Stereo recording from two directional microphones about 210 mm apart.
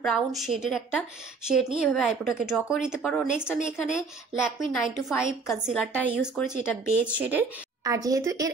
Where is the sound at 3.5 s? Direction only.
35° left (ahead or behind).